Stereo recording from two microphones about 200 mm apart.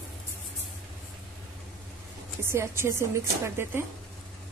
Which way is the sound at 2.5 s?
15° right (ahead or behind).